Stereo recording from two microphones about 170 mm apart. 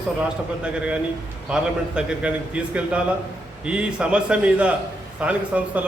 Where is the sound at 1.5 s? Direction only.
5° right (ahead or behind).